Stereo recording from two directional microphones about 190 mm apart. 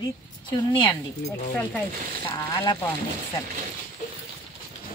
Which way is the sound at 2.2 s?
20° left (ahead or behind).